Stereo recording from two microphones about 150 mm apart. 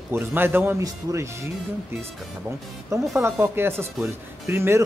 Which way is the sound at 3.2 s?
15° right (ahead or behind).